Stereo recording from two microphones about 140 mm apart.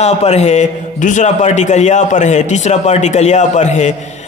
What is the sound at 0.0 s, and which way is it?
Speech, 50° left (ahead or behind).